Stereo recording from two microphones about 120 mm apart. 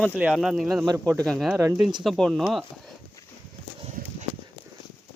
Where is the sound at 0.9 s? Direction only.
30° right (ahead or behind).